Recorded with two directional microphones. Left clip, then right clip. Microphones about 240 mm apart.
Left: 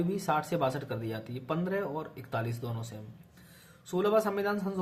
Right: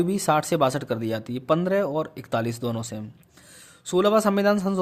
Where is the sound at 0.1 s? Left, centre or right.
Right.